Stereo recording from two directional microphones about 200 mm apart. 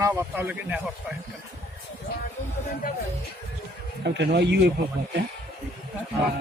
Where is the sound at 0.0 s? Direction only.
10° right (ahead or behind).